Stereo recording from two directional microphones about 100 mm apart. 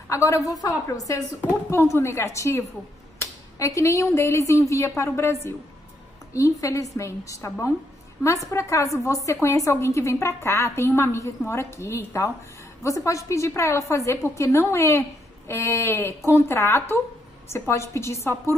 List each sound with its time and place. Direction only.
0.1 s a woman's voice: 30° left (ahead or behind)
6.6 s a woman's voice: 35° left (ahead or behind)